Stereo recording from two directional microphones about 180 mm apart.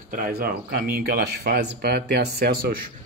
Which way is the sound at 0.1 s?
55° right (ahead or behind).